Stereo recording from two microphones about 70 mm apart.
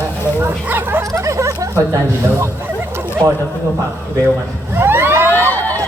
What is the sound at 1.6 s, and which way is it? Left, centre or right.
Speech, right.